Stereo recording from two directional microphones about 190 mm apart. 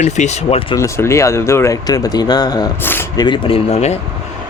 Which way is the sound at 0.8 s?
15° left (ahead or behind).